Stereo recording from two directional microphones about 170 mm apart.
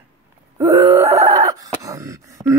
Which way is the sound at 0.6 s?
20° right (ahead or behind).